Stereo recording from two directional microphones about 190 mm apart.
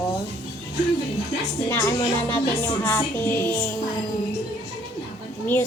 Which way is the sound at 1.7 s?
15° left (ahead or behind).